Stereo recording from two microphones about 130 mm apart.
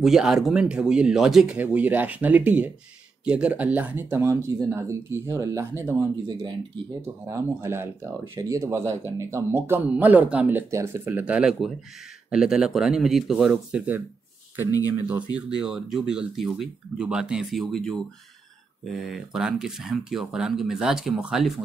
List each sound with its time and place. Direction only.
0.0 s speech: 5° right (ahead or behind)
15.3 s speech: 5° right (ahead or behind)
18.9 s speech: centre (ahead or behind)